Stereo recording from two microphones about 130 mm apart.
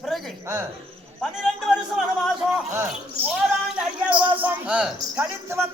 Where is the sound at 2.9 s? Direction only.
5° right (ahead or behind).